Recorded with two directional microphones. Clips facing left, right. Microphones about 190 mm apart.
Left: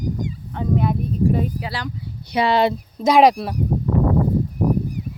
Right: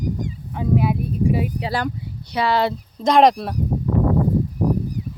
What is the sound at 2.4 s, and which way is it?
Speech, 20° left (ahead or behind).